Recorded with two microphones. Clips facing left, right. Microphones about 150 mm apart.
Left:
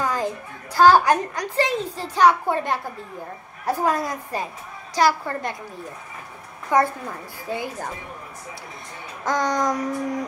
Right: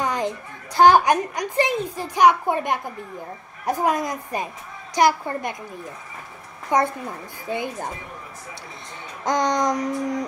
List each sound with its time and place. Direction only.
0.0 s children playing: 20° right (ahead or behind)
0.7 s a woman's voice: 20° right (ahead or behind)
6.7 s speech: 20° right (ahead or behind)
9.2 s a woman's voice: 15° right (ahead or behind)